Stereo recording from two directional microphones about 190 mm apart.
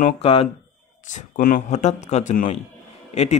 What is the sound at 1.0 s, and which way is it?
A man's voice, 45° left (ahead or behind).